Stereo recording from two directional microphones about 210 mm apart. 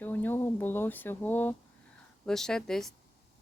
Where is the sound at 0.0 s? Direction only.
10° left (ahead or behind).